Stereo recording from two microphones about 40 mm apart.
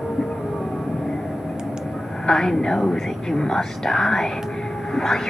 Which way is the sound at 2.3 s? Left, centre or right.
Centre.